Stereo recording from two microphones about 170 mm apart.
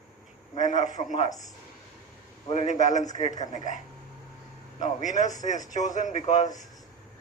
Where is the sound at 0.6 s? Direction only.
45° left (ahead or behind).